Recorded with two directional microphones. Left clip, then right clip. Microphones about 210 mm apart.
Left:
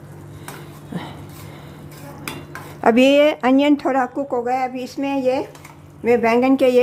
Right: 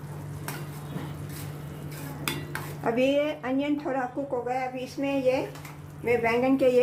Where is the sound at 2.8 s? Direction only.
50° left (ahead or behind).